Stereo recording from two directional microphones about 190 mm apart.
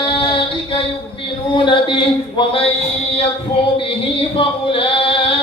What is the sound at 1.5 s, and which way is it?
Speech, 25° left (ahead or behind).